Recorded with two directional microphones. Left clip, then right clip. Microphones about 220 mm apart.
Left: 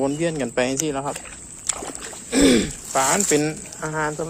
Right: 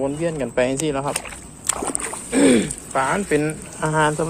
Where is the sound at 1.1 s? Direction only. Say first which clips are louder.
Right 5 dB; 40° right (ahead or behind).